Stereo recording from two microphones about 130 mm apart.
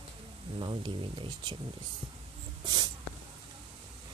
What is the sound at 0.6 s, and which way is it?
Speech, 40° right (ahead or behind).